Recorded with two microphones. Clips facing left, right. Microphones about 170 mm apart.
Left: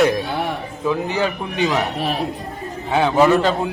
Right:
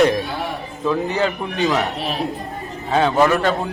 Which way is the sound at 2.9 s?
10° left (ahead or behind).